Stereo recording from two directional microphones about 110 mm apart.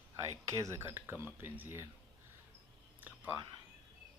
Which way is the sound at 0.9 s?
20° right (ahead or behind).